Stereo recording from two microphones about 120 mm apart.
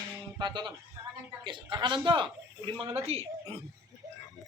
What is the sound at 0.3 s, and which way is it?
A man's voice, 35° right (ahead or behind).